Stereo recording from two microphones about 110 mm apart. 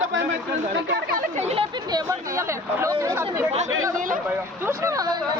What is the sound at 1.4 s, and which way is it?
Speech, 80° right.